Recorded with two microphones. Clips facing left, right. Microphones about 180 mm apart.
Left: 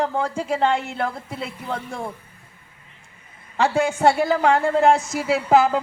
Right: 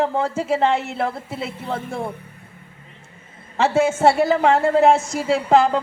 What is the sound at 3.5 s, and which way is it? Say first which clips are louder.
Speech: right 2 dB; centre (ahead or behind).